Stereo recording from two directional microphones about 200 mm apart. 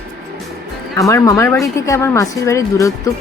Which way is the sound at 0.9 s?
15° left (ahead or behind).